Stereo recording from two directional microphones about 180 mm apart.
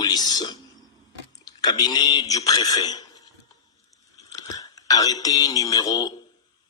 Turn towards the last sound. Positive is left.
turn(degrees=20)  # may be behind; listen again after turning